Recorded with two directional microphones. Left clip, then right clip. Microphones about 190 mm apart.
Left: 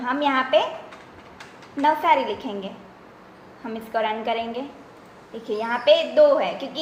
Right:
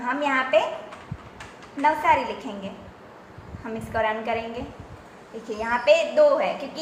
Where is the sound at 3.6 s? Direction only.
45° left (ahead or behind).